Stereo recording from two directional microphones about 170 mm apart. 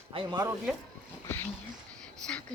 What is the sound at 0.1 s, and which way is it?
Speech, 30° right (ahead or behind).